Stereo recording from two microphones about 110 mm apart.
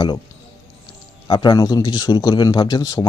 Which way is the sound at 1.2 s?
40° left (ahead or behind).